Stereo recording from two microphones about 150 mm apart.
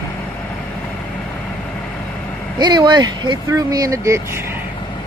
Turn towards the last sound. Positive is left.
turn(degrees=-20)  # may be behind; listen again after turning